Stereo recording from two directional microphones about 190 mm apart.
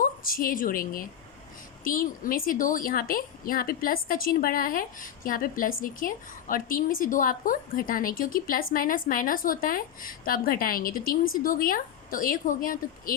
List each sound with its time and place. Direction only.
0.0 s a woman's voice: 50° left (ahead or behind)